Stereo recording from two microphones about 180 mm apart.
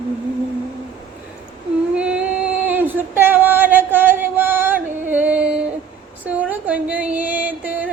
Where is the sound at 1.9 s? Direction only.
5° right (ahead or behind).